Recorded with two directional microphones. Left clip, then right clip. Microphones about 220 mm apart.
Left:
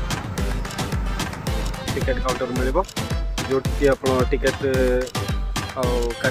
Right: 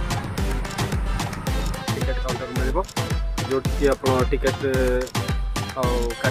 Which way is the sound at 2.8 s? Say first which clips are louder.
Left 4 dB; 15° left (ahead or behind).